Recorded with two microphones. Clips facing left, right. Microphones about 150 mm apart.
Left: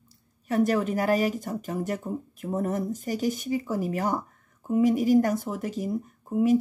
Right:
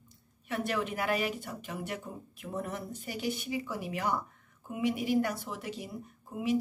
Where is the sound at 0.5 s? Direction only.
40° left (ahead or behind).